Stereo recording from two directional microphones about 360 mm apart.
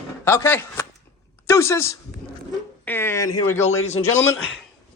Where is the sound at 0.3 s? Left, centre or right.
Centre.